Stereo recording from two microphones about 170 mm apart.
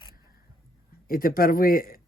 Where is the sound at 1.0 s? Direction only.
60° left (ahead or behind).